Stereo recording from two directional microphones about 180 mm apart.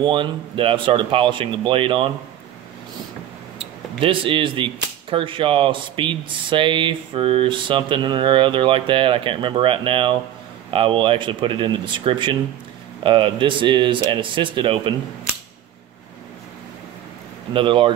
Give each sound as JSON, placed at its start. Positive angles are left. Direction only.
{"t": 0.0, "sound": "speech", "side_deg": -25}
{"t": 4.0, "sound": "speech", "side_deg": -30}
{"t": 17.5, "sound": "speech", "side_deg": -30}